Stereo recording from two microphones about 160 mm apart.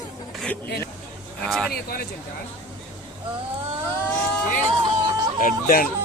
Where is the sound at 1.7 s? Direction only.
70° left (ahead or behind).